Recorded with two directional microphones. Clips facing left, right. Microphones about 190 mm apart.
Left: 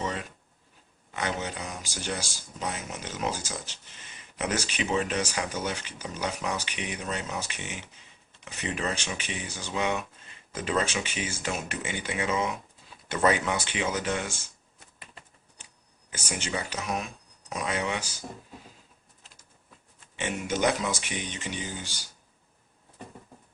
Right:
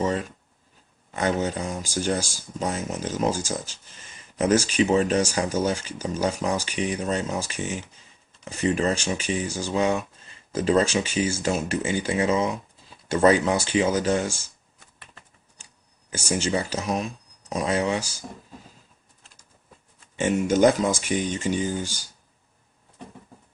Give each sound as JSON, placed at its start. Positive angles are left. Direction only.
{"t": 0.0, "sound": "a sound", "side_deg": -40}
{"t": 1.1, "sound": "speech", "side_deg": -45}
{"t": 16.0, "sound": "speech", "side_deg": -35}
{"t": 20.1, "sound": "speech", "side_deg": -45}